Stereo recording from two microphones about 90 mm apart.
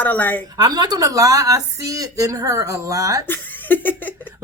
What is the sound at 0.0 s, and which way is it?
Speech, 20° left (ahead or behind).